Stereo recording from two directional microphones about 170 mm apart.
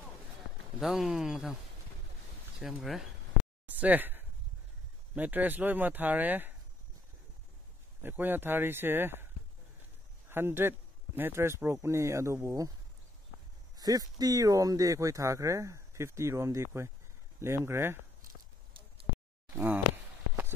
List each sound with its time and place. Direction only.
0.7 s speech: centre (ahead or behind)
2.6 s speech: centre (ahead or behind)
8.0 s speech: 10° right (ahead or behind)
10.3 s speech: 15° right (ahead or behind)
13.7 s speech: 20° right (ahead or behind)